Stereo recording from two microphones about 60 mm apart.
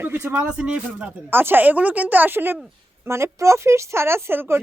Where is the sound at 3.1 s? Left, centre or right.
Right.